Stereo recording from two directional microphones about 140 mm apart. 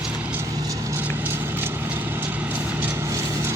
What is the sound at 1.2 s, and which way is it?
Vehicle, 15° right (ahead or behind).